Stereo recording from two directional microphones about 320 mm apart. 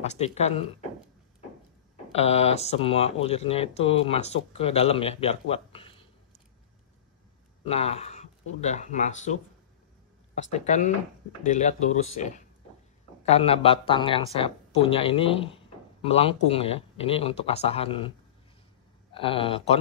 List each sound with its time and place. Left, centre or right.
0.0 s speech: left
2.1 s speech: centre
7.6 s speech: centre
19.1 s speech: centre